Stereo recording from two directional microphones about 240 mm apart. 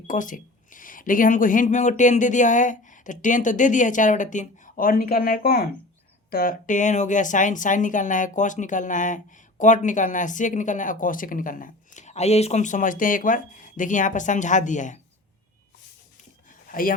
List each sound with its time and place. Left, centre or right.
0.1 s speech: left
16.6 s speech: left